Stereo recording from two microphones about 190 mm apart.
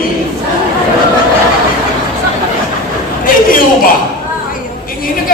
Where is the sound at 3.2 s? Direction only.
45° left (ahead or behind).